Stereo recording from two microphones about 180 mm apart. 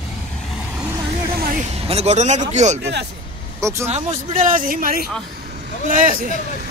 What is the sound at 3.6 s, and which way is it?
Speech, 15° right (ahead or behind).